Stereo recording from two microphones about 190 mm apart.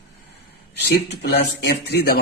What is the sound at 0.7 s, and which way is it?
Speech, 60° left (ahead or behind).